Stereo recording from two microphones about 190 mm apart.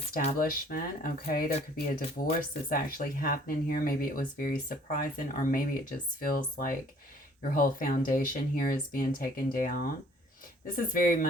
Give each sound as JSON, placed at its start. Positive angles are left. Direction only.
{"t": 0.3, "sound": "speech", "side_deg": 50}